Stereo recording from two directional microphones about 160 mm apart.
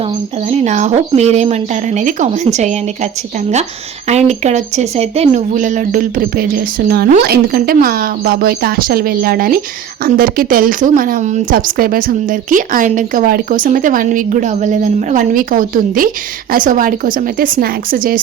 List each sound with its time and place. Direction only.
0.4 s speech: 45° right (ahead or behind)
4.1 s speech: 45° right (ahead or behind); by 18.2 s 60° right (ahead or behind)